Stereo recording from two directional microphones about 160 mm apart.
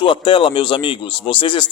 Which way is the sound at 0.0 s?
30° left (ahead or behind).